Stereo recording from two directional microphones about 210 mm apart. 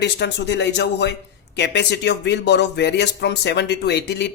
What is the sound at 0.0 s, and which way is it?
Speech, 55° left (ahead or behind).